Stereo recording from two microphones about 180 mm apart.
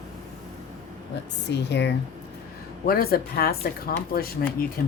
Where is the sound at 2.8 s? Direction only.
55° left (ahead or behind).